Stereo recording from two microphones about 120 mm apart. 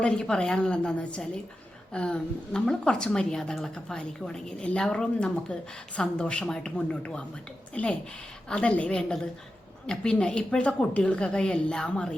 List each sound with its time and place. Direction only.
0.0 s a woman's voice: 5° left (ahead or behind)